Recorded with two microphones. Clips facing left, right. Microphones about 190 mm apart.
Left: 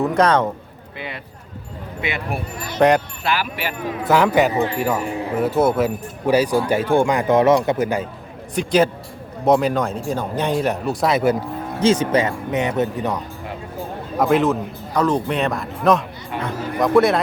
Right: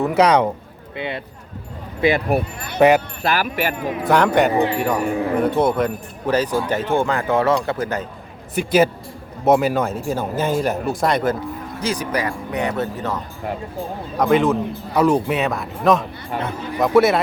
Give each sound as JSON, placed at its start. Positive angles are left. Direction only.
{"t": 0.1, "sound": "speech", "side_deg": -10}
{"t": 0.9, "sound": "speech", "side_deg": -25}
{"t": 2.0, "sound": "speech", "side_deg": -35}
{"t": 2.7, "sound": "speech", "side_deg": -5}
{"t": 3.2, "sound": "speech", "side_deg": -45}
{"t": 4.0, "sound": "speech", "side_deg": 5}
{"t": 8.5, "sound": "speech", "side_deg": -5}
{"t": 11.8, "sound": "speech", "side_deg": 25}
{"t": 14.2, "sound": "speech", "side_deg": 0}
{"t": 16.3, "sound": "speech", "side_deg": -45}
{"t": 16.8, "sound": "speech", "side_deg": 0}